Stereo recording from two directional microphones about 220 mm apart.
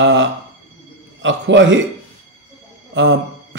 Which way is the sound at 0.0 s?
55° right (ahead or behind).